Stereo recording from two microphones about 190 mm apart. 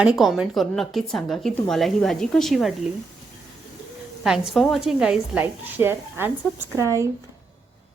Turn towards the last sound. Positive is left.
turn(degrees=-15)  # may be behind; listen again after turning